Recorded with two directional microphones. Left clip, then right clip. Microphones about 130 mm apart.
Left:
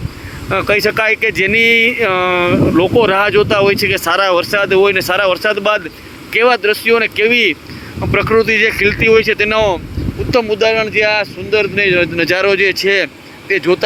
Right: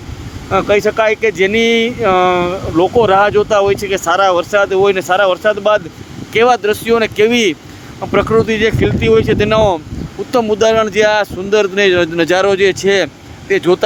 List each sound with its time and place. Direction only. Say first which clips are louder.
0.5 s speech: right 1 dB; 10° right (ahead or behind)
6.3 s speech: even; 25° right (ahead or behind)
8.1 s speech: left 1 dB; 15° right (ahead or behind)
10.3 s speech: right 1 dB; 45° right (ahead or behind); by 13.7 s 30° right (ahead or behind)